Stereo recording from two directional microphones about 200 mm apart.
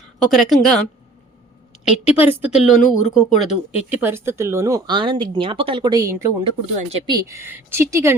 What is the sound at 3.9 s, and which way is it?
A woman's voice, 10° right (ahead or behind).